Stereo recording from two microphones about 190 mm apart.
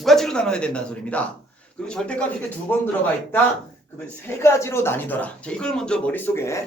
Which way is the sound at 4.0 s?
15° left (ahead or behind).